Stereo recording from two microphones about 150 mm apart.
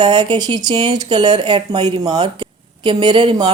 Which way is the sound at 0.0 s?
30° right (ahead or behind).